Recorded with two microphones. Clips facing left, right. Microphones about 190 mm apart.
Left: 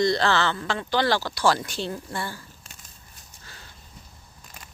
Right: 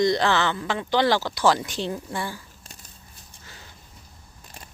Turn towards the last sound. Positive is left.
turn(degrees=-15)  # may be behind; listen again after turning